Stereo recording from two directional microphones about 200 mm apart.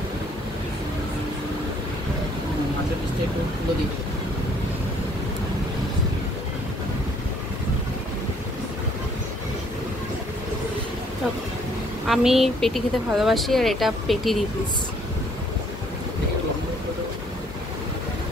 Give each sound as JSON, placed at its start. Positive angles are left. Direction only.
{"t": 12.1, "sound": "speech", "side_deg": 0}